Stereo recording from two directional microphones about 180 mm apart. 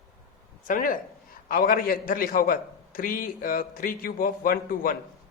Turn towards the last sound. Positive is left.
turn(degrees=50)  # may be behind; listen again after turning